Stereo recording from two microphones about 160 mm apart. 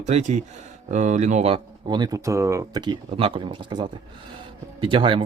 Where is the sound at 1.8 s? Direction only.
25° right (ahead or behind).